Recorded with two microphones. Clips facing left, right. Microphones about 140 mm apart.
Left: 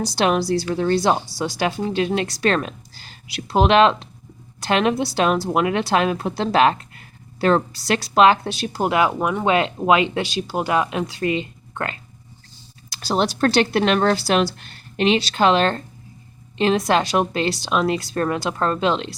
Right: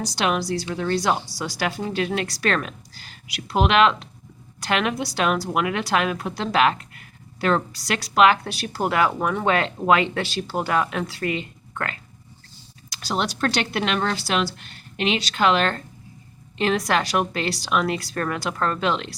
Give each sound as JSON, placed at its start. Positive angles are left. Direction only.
{"t": 0.0, "sound": "a woman's voice", "side_deg": 30}
{"t": 12.9, "sound": "a woman's voice", "side_deg": 35}